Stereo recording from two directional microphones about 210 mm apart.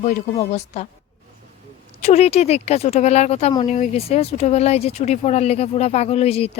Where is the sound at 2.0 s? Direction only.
30° left (ahead or behind).